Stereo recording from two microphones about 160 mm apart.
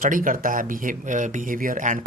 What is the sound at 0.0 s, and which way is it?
Speech, 55° right (ahead or behind).